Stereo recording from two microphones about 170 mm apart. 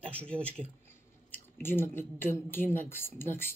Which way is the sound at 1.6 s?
15° left (ahead or behind).